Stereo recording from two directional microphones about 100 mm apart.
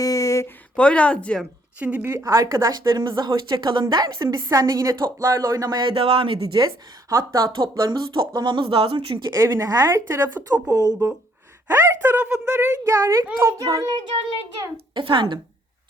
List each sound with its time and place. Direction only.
0.0 s a sound: 35° left (ahead or behind)
0.4 s a woman's voice: 10° left (ahead or behind)
1.8 s a woman's voice: 15° right (ahead or behind)
2.0 s speech: 25° right (ahead or behind); by 4.1 s 45° right (ahead or behind)
4.2 s speech: 30° right (ahead or behind)
4.5 s speech: 40° right (ahead or behind)
5.8 s speech: 65° right (ahead or behind)
7.1 s speech: 30° right (ahead or behind); by 9.3 s 60° right (ahead or behind)
9.4 s speech: 35° right (ahead or behind)
9.9 s speech: 25° right (ahead or behind)
10.7 s speech: 40° right (ahead or behind)
11.7 s speech: 25° right (ahead or behind)
13.9 s a woman's voice: 55° right (ahead or behind)